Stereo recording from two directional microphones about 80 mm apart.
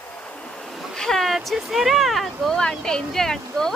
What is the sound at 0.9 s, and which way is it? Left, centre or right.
Speech, centre.